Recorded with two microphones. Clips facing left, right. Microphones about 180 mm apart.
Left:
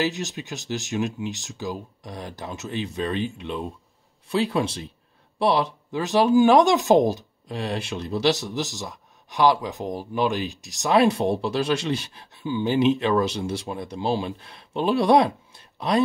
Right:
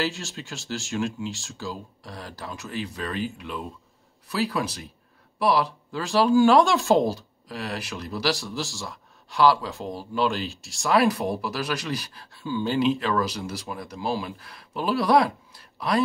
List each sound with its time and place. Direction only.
0.0 s speech: 20° left (ahead or behind)